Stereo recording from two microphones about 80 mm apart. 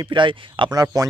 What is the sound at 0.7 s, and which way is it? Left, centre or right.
Speech, right.